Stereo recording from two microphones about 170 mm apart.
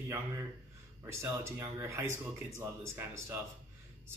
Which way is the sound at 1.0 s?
15° right (ahead or behind).